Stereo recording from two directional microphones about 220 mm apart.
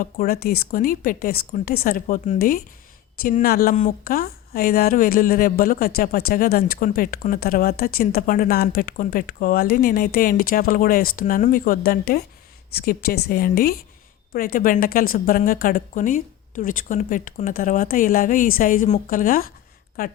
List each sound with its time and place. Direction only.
0.0 s speech: 40° left (ahead or behind)